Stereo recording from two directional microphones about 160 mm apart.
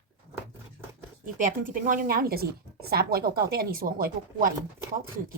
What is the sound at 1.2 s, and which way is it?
A woman's voice, 55° right (ahead or behind).